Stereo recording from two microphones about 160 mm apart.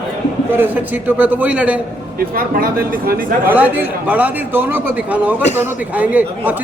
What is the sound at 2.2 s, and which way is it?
Speech, 65° right (ahead or behind).